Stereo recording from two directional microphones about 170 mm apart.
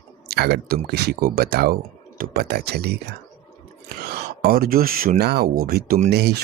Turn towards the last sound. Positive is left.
turn(degrees=-75)  # may be behind; listen again after turning